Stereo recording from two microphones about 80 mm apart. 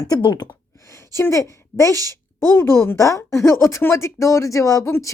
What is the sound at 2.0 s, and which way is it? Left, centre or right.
A woman's voice, left.